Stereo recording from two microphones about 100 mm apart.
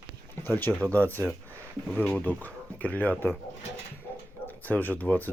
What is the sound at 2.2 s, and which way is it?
Speech, 15° left (ahead or behind).